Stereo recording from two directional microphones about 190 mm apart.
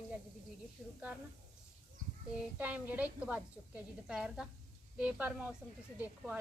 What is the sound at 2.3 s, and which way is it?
A woman's voice, 5° right (ahead or behind).